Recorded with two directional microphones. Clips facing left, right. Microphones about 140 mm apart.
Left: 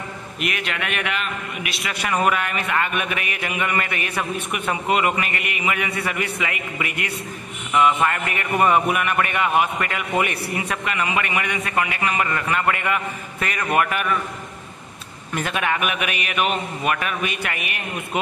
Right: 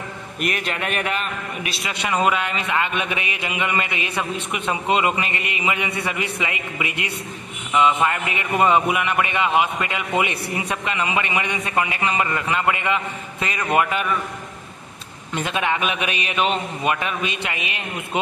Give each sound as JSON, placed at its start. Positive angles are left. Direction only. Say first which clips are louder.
{"t": 0.4, "sound": "a man's voice", "louder": "right 2 dB", "side_deg": -40}
{"t": 1.9, "sound": "a man's voice", "louder": "even", "side_deg": -20}
{"t": 15.3, "sound": "a man's voice", "louder": "right 1 dB", "side_deg": -20}